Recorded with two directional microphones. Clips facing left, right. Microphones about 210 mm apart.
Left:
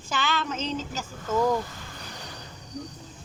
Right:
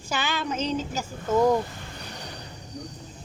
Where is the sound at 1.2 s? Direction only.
30° right (ahead or behind).